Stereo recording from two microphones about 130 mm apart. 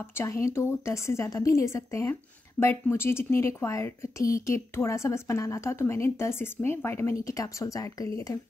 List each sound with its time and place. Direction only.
0.2 s speech: 20° left (ahead or behind)